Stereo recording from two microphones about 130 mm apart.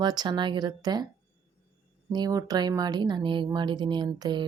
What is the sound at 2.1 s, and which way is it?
Speech, 30° right (ahead or behind).